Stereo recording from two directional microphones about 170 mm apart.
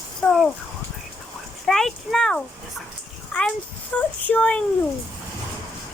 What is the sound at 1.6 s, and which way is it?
Speech, centre (ahead or behind).